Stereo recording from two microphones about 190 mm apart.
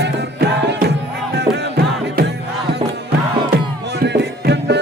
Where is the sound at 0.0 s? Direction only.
60° right (ahead or behind).